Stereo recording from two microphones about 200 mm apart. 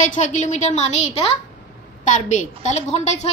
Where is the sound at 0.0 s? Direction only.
40° left (ahead or behind).